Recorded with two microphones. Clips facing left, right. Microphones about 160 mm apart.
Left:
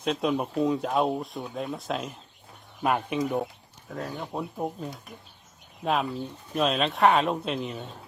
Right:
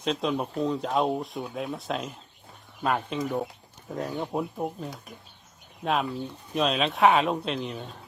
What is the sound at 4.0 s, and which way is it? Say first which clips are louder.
Speech: right 3 dB; 15° right (ahead or behind).